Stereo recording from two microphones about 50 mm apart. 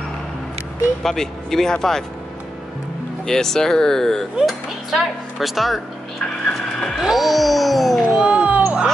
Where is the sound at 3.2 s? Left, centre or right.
Centre.